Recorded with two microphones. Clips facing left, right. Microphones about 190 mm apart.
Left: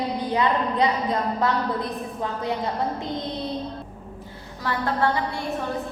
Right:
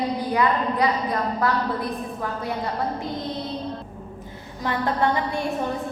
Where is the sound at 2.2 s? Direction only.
20° left (ahead or behind).